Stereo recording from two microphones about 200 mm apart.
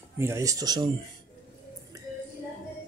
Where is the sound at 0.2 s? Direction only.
15° right (ahead or behind).